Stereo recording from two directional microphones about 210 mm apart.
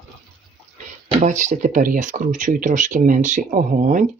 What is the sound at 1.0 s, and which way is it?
Speech, 35° right (ahead or behind).